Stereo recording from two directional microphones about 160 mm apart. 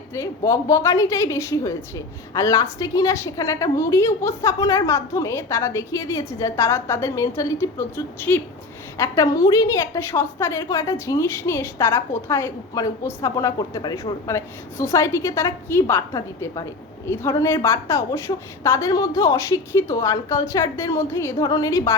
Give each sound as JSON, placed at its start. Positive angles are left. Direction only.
{"t": 0.1, "sound": "a woman's voice", "side_deg": 20}